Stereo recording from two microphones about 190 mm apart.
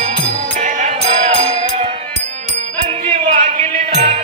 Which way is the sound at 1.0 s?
40° right (ahead or behind).